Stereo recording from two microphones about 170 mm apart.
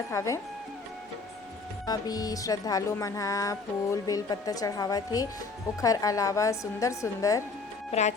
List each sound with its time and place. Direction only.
0.1 s speech: 15° left (ahead or behind)
1.9 s speech: 20° left (ahead or behind)